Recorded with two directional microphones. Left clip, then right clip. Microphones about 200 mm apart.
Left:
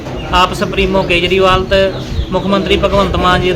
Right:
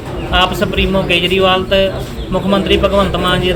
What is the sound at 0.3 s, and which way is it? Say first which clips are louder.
A man's voice: left 1 dB; 10° left (ahead or behind).